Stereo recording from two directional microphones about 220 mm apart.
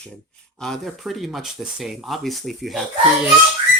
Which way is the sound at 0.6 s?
Centre (ahead or behind).